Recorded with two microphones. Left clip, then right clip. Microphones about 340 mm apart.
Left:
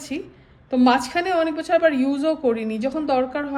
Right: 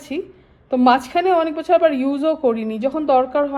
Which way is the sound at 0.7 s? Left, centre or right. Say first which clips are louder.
Right 3 dB; centre.